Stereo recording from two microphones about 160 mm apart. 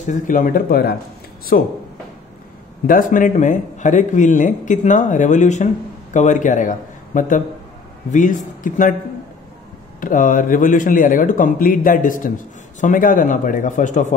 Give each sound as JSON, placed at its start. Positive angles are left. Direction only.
{"t": 0.0, "sound": "speech", "side_deg": 55}
{"t": 1.5, "sound": "speech", "side_deg": 60}
{"t": 2.9, "sound": "a man's voice", "side_deg": 60}
{"t": 9.9, "sound": "a man's voice", "side_deg": 55}